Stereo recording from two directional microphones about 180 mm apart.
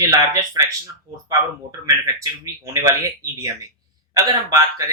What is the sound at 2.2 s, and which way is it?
Speech, 20° right (ahead or behind).